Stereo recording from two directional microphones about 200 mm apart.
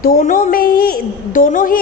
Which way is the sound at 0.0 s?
45° left (ahead or behind).